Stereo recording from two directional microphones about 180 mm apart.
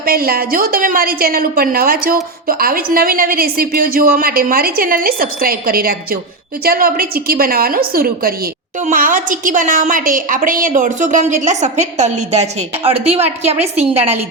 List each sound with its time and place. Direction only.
0.0 s a woman's voice: 55° right (ahead or behind); by 14.2 s 35° right (ahead or behind)